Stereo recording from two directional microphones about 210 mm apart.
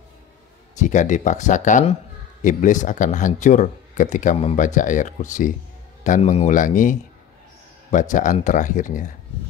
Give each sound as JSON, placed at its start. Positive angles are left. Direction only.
{"t": 0.7, "sound": "speech", "side_deg": 35}